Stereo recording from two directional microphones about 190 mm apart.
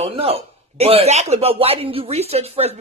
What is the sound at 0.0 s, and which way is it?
A man's voice, 30° right (ahead or behind).